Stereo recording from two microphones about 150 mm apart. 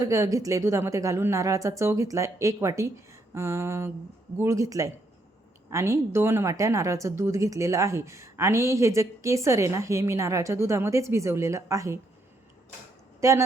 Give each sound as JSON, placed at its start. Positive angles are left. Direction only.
{"t": 0.0, "sound": "a woman's voice", "side_deg": -20}
{"t": 3.3, "sound": "a sound", "side_deg": -15}
{"t": 4.4, "sound": "a woman's voice", "side_deg": -20}
{"t": 13.2, "sound": "a woman's voice", "side_deg": -20}